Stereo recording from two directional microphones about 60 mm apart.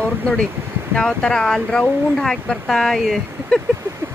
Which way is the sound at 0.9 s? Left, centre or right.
Centre.